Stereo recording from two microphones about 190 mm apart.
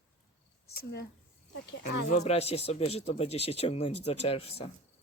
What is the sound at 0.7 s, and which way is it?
Speech, 50° left (ahead or behind).